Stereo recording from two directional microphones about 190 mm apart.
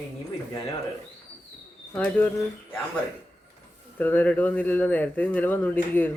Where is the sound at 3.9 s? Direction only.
10° left (ahead or behind).